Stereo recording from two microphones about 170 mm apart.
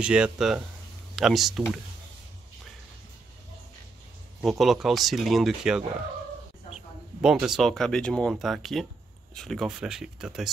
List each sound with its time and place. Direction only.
0.0 s speech: 5° right (ahead or behind)
4.4 s speech: centre (ahead or behind)
7.2 s speech: 5° right (ahead or behind)